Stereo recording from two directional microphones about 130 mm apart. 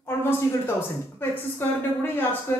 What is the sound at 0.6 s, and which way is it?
A woman's voice, 15° left (ahead or behind).